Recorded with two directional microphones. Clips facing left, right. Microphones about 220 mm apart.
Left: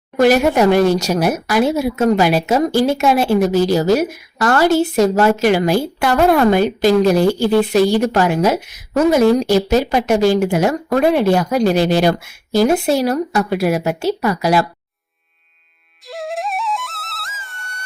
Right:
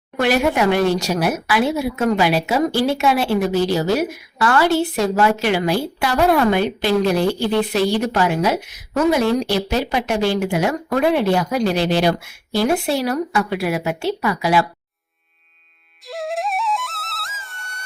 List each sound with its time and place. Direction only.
0.2 s speech: 40° left (ahead or behind)
16.0 s flute: centre (ahead or behind)